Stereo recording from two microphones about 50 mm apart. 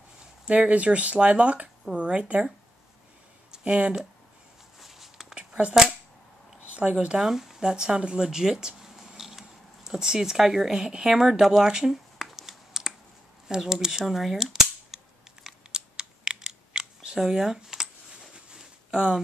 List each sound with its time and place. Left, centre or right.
0.5 s speech: right
3.5 s speech: centre
4.7 s walk: centre
5.3 s a sound: right
6.7 s speech: right
7.2 s speech: centre
14.0 s cap gun: centre
15.7 s computer keyboard: centre
18.5 s a sound: centre